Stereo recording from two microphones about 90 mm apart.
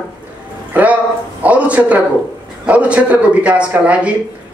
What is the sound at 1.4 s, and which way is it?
A man's voice, 15° right (ahead or behind).